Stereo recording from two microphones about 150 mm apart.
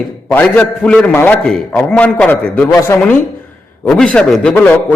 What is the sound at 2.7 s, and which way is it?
Speech, 20° left (ahead or behind).